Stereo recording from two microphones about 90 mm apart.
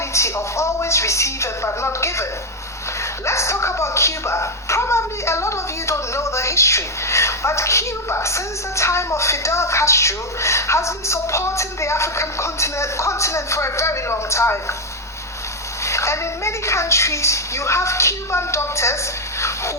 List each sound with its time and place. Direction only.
0.1 s speech: 30° left (ahead or behind)
15.8 s speech: 35° left (ahead or behind)
19.4 s a sound: 30° left (ahead or behind)